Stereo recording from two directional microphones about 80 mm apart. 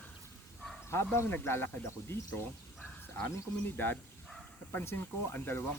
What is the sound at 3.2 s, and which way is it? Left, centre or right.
Speech, left.